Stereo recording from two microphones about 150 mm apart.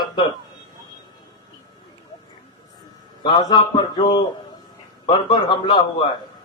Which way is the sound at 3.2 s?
30° left (ahead or behind).